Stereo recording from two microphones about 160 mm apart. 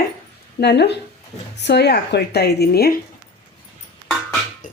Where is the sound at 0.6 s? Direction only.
90° left.